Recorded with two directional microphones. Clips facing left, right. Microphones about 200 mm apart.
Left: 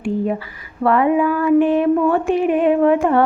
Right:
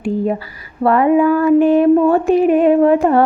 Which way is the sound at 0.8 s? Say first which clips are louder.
Right 3 dB; 40° right (ahead or behind).